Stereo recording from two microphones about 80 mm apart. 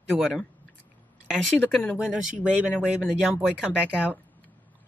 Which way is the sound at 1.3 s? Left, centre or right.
Centre.